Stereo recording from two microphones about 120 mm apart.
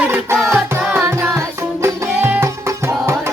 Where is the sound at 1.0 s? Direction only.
20° right (ahead or behind).